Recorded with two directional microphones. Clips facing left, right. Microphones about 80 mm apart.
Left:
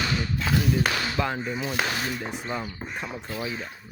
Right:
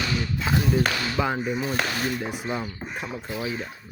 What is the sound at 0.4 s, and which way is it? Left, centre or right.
Speech, right.